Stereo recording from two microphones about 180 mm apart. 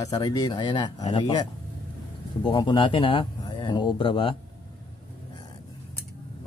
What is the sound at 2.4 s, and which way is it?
Speech, 25° left (ahead or behind).